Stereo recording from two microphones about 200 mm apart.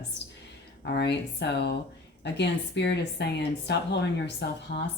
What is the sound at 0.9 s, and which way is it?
A woman's voice, 55° left (ahead or behind).